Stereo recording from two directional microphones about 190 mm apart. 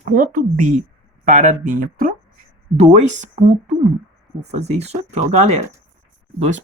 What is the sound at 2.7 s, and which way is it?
Speech, 35° right (ahead or behind).